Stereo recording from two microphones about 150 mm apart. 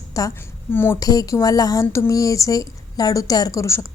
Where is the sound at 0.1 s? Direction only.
20° left (ahead or behind).